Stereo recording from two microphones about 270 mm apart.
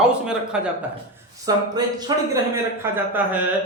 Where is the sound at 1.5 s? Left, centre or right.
Centre.